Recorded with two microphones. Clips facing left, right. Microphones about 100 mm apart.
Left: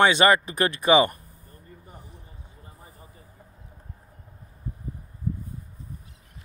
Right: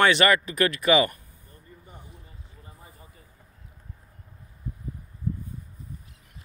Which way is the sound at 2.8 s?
30° left (ahead or behind).